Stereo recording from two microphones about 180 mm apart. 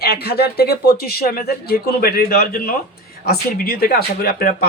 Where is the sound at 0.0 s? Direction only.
60° left (ahead or behind).